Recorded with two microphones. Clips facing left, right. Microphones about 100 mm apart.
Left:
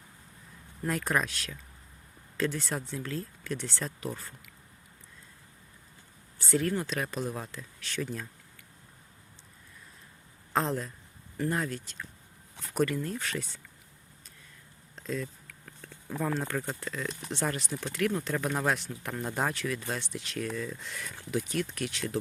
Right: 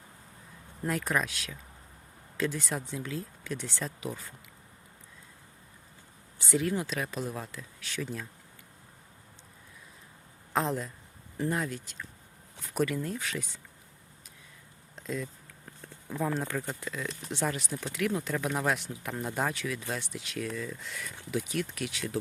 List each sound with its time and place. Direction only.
0.9 s speech: centre (ahead or behind)
6.5 s speech: 10° right (ahead or behind)
10.5 s speech: 5° right (ahead or behind)
14.9 s a sound: 10° right (ahead or behind)
15.4 s a sound: 25° right (ahead or behind)
16.2 s speech: 5° right (ahead or behind)